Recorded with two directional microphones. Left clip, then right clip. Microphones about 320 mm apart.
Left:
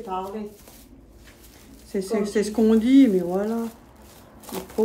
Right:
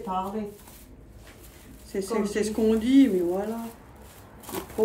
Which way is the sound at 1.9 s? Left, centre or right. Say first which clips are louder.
Left 3 dB; centre.